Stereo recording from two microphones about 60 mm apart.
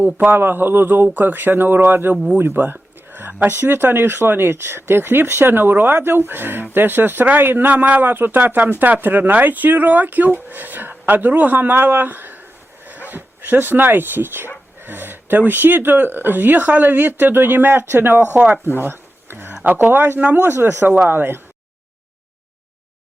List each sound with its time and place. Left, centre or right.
0.0 s speech: right
2.4 s a sound: right
3.5 s speech: right
18.8 s a sound: right
19.6 s speech: right
20.1 s speech: right
20.4 s speech: right